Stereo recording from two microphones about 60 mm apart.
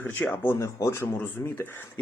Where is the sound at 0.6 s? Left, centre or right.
Left.